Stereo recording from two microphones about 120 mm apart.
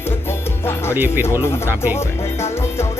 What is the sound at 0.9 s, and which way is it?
Speech, 15° right (ahead or behind).